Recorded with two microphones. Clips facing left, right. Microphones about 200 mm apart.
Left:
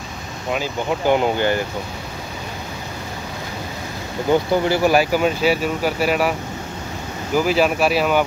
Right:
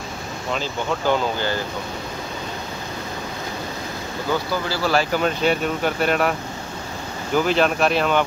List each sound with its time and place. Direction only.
0.5 s speech: 10° left (ahead or behind)
4.3 s speech: 20° left (ahead or behind); by 6.3 s 5° left (ahead or behind)
7.3 s speech: 5° left (ahead or behind)